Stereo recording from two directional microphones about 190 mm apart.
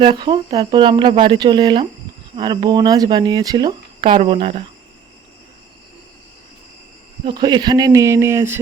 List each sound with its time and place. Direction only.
0.0 s speech: 25° right (ahead or behind)
7.3 s speech: 25° right (ahead or behind)